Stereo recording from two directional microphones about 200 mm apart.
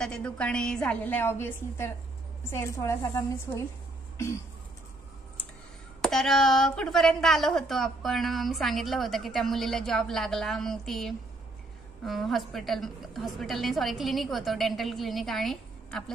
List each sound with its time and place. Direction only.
0.0 s a woman's voice: 5° left (ahead or behind)
5.9 s a woman's voice: centre (ahead or behind)